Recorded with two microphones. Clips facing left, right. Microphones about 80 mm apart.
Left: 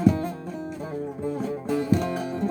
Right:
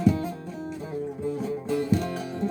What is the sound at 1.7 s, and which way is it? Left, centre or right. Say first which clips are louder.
Music: left 2 dB; left.